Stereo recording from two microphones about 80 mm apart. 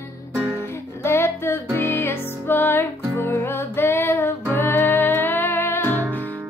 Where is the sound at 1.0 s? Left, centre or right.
Left.